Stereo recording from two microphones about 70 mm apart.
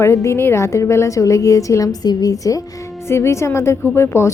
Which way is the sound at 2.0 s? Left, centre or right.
Left.